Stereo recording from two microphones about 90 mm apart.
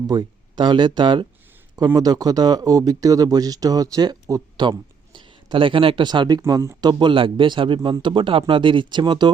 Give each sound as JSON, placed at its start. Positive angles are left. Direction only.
{"t": 0.1, "sound": "speech", "side_deg": -55}
{"t": 2.0, "sound": "speech", "side_deg": -45}
{"t": 5.1, "sound": "speech", "side_deg": -60}
{"t": 6.5, "sound": "speech", "side_deg": -35}
{"t": 6.8, "sound": "speech", "side_deg": -65}